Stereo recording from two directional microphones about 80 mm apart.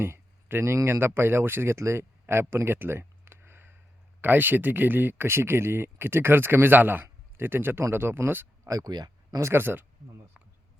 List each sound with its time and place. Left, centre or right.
0.0 s speech: right
8.6 s speech: right
9.4 s speech: right